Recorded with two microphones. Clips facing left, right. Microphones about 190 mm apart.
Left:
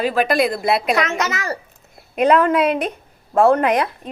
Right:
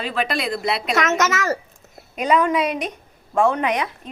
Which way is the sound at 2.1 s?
55° left (ahead or behind).